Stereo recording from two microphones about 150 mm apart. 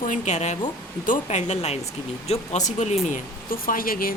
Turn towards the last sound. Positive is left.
turn(degrees=70)  # may be behind; listen again after turning